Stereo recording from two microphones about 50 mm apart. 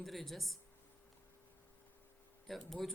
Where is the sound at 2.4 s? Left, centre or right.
Centre.